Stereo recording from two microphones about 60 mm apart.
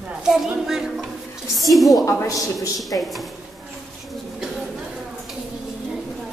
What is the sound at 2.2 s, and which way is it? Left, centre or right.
Speech, left.